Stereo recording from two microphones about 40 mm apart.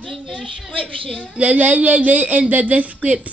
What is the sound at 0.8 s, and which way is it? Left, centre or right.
Speech, left.